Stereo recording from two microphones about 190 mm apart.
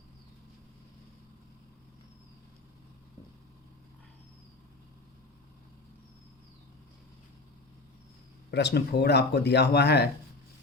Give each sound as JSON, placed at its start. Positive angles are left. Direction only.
{"t": 8.4, "sound": "speech", "side_deg": 60}